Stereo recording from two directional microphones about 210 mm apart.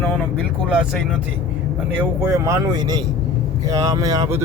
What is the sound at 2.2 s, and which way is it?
Speech, 15° right (ahead or behind).